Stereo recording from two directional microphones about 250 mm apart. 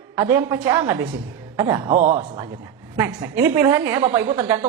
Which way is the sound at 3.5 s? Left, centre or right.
Centre.